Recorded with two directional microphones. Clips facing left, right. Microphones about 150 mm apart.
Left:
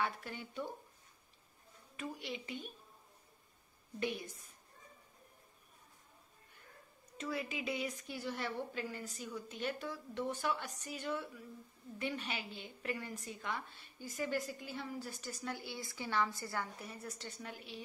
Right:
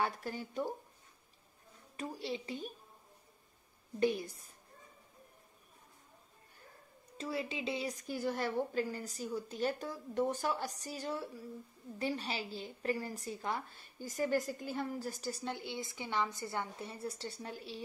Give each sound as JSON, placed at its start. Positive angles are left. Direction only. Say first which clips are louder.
{"t": 0.0, "sound": "a woman's voice", "louder": "right 3 dB", "side_deg": -40}
{"t": 2.0, "sound": "a woman's voice", "louder": "right 4 dB", "side_deg": -35}
{"t": 4.0, "sound": "a woman's voice", "louder": "right 7 dB", "side_deg": -35}
{"t": 7.2, "sound": "a woman's voice", "louder": "right 2 dB", "side_deg": -30}